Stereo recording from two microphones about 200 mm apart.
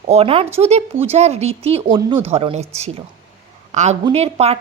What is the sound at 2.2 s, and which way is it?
Speech, 30° right (ahead or behind).